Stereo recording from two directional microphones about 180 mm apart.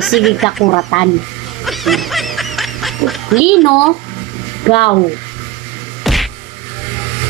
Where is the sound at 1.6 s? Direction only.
Centre (ahead or behind).